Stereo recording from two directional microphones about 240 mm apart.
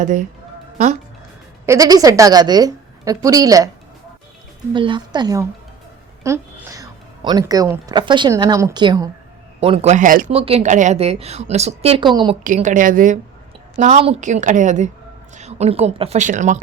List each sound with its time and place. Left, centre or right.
0.0 s a woman's voice: right
1.6 s a woman's voice: centre
4.7 s a woman's voice: centre
12.4 s a woman's voice: right